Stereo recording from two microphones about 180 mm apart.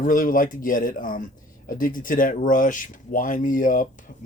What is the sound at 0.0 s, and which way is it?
Speech, 50° left (ahead or behind).